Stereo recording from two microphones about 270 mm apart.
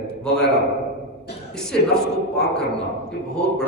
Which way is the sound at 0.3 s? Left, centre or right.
Centre.